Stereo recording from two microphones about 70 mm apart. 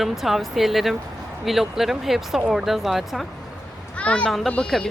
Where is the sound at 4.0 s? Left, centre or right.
Centre.